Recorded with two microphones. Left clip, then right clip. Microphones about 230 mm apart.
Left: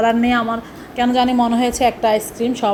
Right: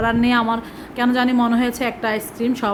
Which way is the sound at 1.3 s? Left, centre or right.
Centre.